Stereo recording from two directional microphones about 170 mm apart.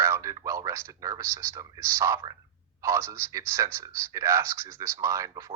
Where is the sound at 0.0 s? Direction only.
15° right (ahead or behind).